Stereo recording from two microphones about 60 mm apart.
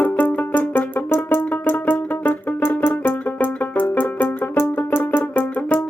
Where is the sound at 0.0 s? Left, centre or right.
Left.